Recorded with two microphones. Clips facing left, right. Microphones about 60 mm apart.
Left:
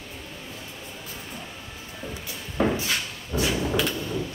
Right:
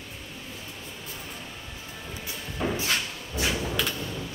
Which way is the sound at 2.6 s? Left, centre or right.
Left.